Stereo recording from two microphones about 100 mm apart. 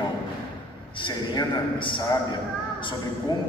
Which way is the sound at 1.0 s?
55° left (ahead or behind).